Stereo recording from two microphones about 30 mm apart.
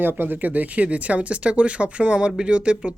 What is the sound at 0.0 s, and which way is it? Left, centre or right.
Speech, right.